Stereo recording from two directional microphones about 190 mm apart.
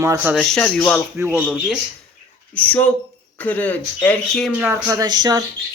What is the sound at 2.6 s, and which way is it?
Speech, 10° left (ahead or behind).